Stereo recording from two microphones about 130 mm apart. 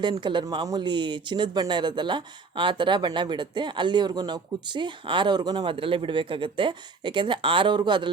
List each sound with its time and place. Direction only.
0.0 s speech: 35° right (ahead or behind)